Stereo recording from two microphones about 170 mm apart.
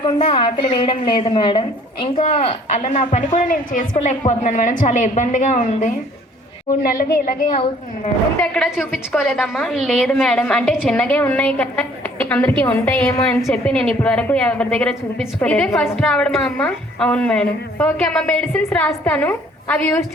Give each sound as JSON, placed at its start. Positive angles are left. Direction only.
{"t": 0.0, "sound": "a woman's voice", "side_deg": 30}
{"t": 7.5, "sound": "a woman's voice", "side_deg": 35}
{"t": 8.4, "sound": "a woman's voice", "side_deg": 0}